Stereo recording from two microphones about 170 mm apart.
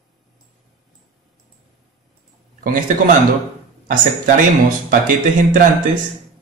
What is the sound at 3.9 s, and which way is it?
Speech, 50° right (ahead or behind).